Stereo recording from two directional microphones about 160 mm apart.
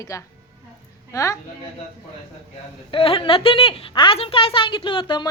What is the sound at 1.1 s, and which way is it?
Speech, 20° left (ahead or behind).